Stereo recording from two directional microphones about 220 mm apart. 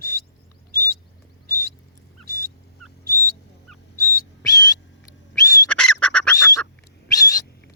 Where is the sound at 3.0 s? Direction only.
40° right (ahead or behind).